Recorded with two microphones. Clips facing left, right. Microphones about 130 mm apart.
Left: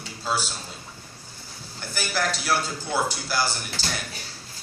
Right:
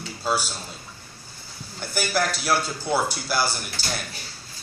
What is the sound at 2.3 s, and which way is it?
Speech, 10° right (ahead or behind).